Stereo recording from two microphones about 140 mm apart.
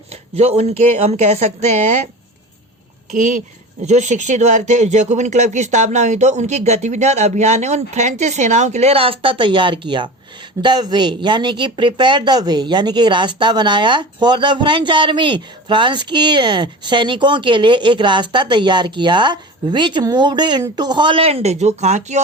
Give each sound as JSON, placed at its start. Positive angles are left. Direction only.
{"t": 0.1, "sound": "a woman's voice", "side_deg": -50}
{"t": 3.1, "sound": "speech", "side_deg": -65}